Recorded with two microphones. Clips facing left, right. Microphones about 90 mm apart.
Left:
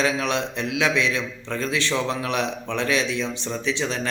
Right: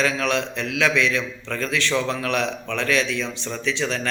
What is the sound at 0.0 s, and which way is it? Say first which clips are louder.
Speech: right 1 dB; 20° left (ahead or behind).